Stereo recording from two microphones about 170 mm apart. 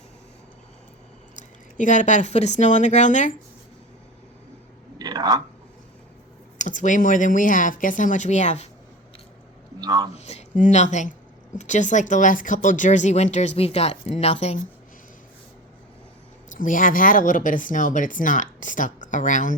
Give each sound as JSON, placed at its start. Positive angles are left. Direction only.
{"t": 1.4, "sound": "speech", "side_deg": 45}
{"t": 4.9, "sound": "a sound", "side_deg": -25}
{"t": 6.6, "sound": "speech", "side_deg": 45}
{"t": 9.8, "sound": "speech", "side_deg": -20}
{"t": 10.2, "sound": "speech", "side_deg": 40}
{"t": 16.6, "sound": "speech", "side_deg": 50}